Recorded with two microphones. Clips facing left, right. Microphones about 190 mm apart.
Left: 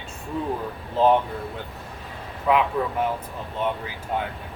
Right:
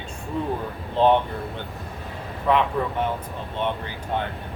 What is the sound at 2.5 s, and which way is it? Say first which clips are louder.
Speech: even; 5° left (ahead or behind).